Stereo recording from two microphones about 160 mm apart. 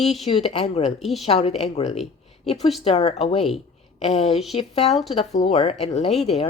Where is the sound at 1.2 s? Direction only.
40° left (ahead or behind).